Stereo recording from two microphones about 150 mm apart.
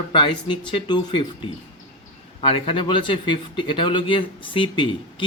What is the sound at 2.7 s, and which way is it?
Speech, 35° left (ahead or behind).